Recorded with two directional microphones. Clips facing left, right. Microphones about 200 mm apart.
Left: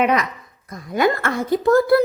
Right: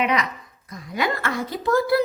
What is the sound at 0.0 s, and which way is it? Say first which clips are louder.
A woman's voice: left 4 dB; 50° left (ahead or behind).